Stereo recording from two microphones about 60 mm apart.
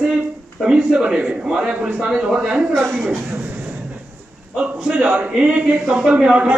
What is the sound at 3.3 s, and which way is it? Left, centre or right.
Vehicle, right.